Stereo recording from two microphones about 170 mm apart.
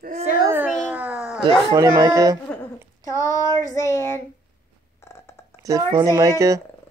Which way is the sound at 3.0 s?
20° left (ahead or behind).